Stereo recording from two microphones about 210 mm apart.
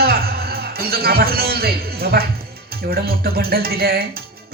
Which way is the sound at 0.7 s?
45° right (ahead or behind).